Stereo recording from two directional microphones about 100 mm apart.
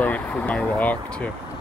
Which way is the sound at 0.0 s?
15° left (ahead or behind).